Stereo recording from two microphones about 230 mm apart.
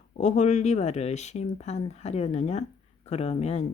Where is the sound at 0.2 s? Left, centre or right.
Left.